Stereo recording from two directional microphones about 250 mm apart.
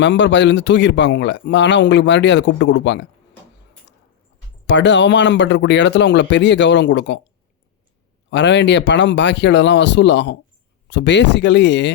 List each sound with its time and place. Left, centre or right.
0.0 s a man's voice: left
4.6 s a man's voice: left
8.3 s a man's voice: left